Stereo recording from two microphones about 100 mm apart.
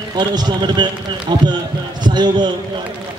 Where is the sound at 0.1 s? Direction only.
45° right (ahead or behind).